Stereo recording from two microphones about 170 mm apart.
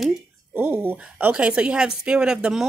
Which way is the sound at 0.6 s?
10° right (ahead or behind).